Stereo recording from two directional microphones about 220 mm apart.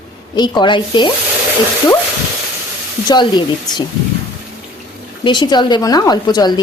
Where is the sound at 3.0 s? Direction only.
20° left (ahead or behind).